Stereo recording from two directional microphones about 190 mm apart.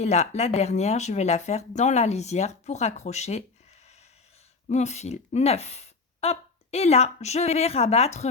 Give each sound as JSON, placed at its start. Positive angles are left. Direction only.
{"t": 0.0, "sound": "speech", "side_deg": 35}
{"t": 4.7, "sound": "speech", "side_deg": 35}